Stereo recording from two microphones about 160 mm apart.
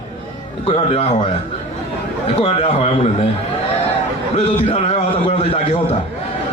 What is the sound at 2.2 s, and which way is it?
A man's voice, 40° left (ahead or behind).